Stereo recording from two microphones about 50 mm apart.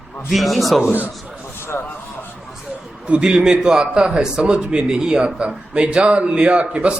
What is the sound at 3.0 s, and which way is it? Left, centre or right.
A man's voice, right.